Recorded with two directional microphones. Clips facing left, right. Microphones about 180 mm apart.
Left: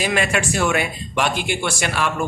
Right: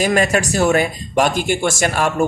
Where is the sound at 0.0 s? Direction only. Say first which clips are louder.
Right 5 dB; 40° right (ahead or behind).